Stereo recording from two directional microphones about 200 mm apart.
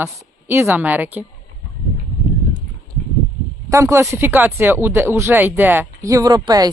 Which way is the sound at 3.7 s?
15° right (ahead or behind).